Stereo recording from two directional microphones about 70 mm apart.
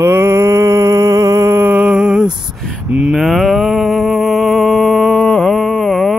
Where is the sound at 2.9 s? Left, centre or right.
Centre.